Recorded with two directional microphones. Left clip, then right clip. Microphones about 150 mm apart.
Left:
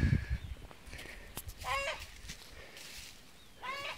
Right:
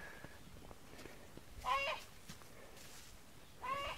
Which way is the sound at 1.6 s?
60° left (ahead or behind).